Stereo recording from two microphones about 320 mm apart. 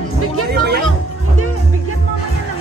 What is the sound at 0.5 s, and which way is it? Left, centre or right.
Music, right.